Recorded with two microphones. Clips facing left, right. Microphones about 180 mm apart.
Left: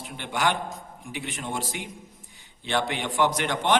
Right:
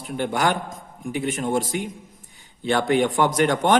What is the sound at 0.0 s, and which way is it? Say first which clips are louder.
A man's voice: right 5 dB; 45° right (ahead or behind).